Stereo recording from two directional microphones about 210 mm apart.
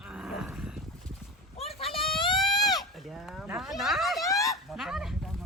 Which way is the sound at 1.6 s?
30° left (ahead or behind).